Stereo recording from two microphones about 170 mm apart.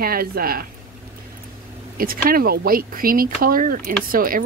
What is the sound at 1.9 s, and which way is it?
Speech, 60° right (ahead or behind).